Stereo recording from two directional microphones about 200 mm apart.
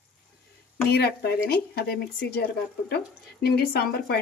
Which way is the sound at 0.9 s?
55° left (ahead or behind).